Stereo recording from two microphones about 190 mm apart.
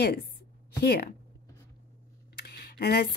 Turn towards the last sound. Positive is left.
turn(degrees=55)  # may be behind; listen again after turning